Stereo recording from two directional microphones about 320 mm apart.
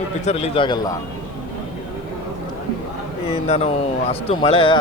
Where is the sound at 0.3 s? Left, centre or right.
Centre.